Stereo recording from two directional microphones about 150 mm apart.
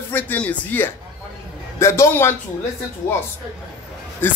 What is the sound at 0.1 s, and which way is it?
Speech, 10° left (ahead or behind).